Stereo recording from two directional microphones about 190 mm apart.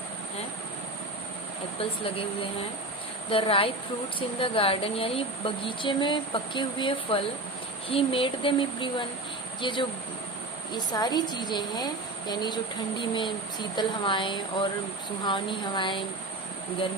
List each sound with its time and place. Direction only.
1.8 s speech: 30° left (ahead or behind)